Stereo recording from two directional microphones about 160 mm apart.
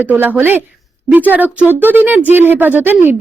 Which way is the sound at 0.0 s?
10° right (ahead or behind).